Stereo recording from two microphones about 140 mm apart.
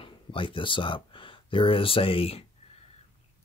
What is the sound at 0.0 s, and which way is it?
Speech, 40° left (ahead or behind).